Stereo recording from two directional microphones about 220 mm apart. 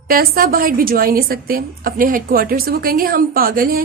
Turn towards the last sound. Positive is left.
turn(degrees=-40)  # may be behind; listen again after turning